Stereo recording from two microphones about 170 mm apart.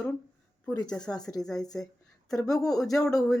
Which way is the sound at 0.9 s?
5° left (ahead or behind).